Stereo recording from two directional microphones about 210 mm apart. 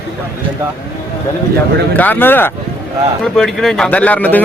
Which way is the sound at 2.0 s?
10° left (ahead or behind).